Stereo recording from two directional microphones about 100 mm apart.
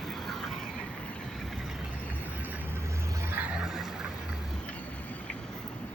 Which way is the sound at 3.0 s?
35° right (ahead or behind).